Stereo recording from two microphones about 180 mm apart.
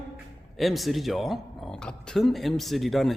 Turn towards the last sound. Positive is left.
turn(degrees=0)  # may be behind; listen again after turning